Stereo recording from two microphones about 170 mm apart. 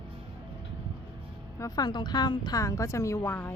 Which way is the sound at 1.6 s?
25° left (ahead or behind).